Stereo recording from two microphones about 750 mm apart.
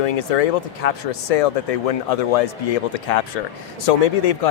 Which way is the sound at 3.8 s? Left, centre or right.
Left.